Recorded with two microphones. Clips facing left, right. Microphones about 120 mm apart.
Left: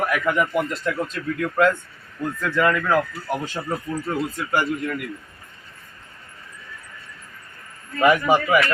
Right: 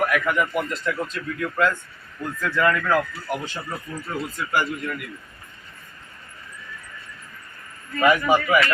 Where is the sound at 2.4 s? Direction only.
20° left (ahead or behind).